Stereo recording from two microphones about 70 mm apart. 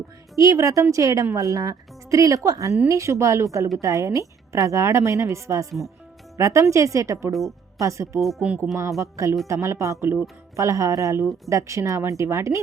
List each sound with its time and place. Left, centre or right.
0.3 s a woman's voice: right
8.2 s speech: centre
8.4 s music: centre
9.0 s a woman's voice: right